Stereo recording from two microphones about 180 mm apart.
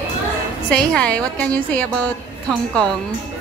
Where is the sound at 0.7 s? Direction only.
5° left (ahead or behind).